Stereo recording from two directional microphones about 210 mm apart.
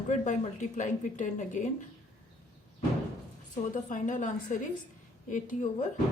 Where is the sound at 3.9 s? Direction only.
35° left (ahead or behind).